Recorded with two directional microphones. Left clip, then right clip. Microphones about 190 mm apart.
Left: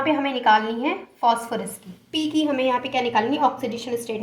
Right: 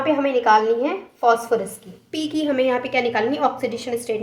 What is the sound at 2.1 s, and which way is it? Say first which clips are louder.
A woman's voice: right 1 dB; 30° right (ahead or behind).